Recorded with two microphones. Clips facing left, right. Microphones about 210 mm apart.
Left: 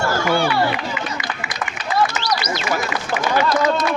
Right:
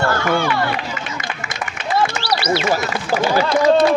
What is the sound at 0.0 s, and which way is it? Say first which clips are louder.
Run: right 1 dB; 60° right (ahead or behind).